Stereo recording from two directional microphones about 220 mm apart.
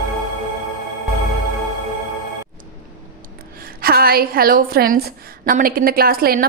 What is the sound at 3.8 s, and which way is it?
A woman's voice, 45° right (ahead or behind).